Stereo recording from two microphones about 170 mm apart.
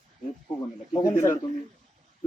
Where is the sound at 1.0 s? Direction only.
50° left (ahead or behind).